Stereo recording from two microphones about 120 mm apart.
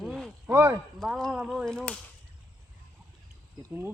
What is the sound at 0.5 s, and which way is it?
Speech, 20° right (ahead or behind).